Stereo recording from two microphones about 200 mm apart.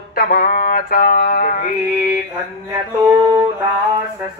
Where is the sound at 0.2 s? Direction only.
45° left (ahead or behind).